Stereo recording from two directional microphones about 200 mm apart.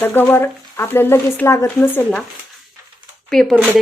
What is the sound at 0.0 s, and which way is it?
Speech, 10° left (ahead or behind).